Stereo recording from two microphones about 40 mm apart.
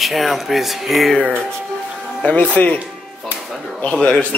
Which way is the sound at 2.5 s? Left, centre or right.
Left.